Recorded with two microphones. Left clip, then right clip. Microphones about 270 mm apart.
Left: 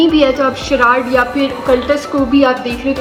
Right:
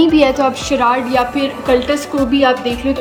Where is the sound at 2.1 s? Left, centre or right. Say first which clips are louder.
Left 1 dB; right.